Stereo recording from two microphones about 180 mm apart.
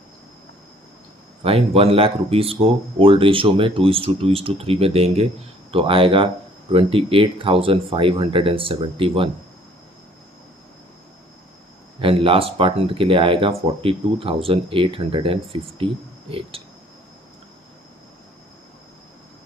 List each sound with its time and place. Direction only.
1.5 s speech: 35° right (ahead or behind)
11.9 s speech: 30° right (ahead or behind)